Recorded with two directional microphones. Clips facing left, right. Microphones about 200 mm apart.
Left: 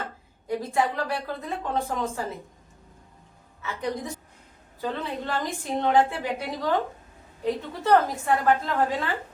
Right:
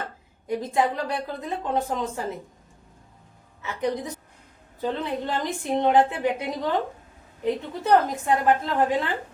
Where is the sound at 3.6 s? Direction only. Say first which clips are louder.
Right 3 dB; 20° right (ahead or behind).